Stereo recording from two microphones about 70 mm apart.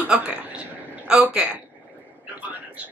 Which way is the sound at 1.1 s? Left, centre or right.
Centre.